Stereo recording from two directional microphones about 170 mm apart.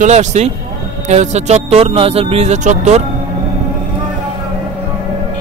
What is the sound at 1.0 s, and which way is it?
Music, 45° right (ahead or behind).